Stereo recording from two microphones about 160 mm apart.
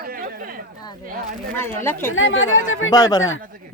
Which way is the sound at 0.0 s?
65° right (ahead or behind).